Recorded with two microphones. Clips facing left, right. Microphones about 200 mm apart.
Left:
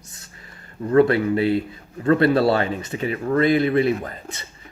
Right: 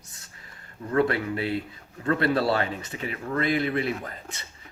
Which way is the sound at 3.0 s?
35° left (ahead or behind).